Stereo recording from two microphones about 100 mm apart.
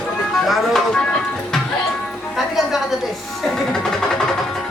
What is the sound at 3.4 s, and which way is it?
Speech, 5° left (ahead or behind).